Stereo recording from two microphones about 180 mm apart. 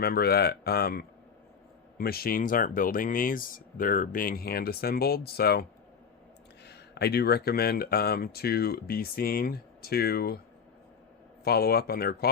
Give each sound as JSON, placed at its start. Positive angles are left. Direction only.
{"t": 0.0, "sound": "speech", "side_deg": 60}
{"t": 6.7, "sound": "speech", "side_deg": 65}
{"t": 11.4, "sound": "speech", "side_deg": 60}